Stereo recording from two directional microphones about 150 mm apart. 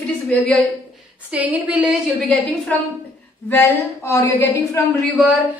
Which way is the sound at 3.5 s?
15° left (ahead or behind).